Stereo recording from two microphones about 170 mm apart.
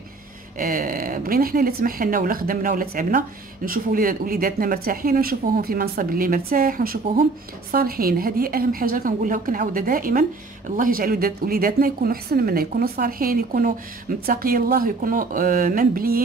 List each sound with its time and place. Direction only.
0.6 s speech: 55° right (ahead or behind)